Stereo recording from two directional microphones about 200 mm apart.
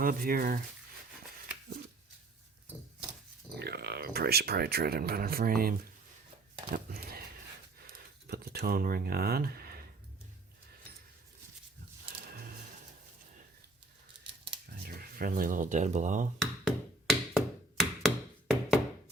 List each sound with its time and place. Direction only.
0.0 s speech: 45° right (ahead or behind)
3.6 s speech: 50° right (ahead or behind)
7.9 s a sound: 50° right (ahead or behind)
12.0 s a sound: 50° right (ahead or behind)
14.8 s speech: 45° right (ahead or behind)
16.4 s tap: centre (ahead or behind)